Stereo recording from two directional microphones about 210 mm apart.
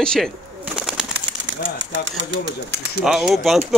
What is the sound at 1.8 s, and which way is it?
Speech, 60° right (ahead or behind).